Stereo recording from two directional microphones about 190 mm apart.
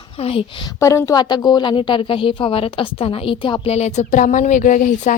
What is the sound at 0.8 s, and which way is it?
A woman's voice, 15° left (ahead or behind).